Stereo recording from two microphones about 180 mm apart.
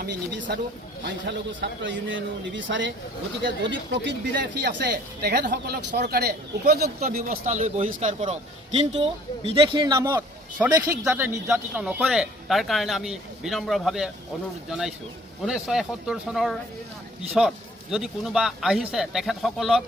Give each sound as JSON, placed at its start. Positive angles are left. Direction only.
{"t": 0.0, "sound": "a man's voice", "side_deg": -65}
{"t": 3.7, "sound": "speech", "side_deg": -80}
{"t": 7.0, "sound": "a man's voice", "side_deg": -50}
{"t": 9.0, "sound": "a man's voice", "side_deg": -30}
{"t": 17.9, "sound": "speech", "side_deg": 0}